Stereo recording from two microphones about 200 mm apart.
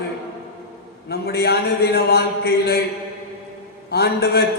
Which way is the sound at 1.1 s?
55° left (ahead or behind).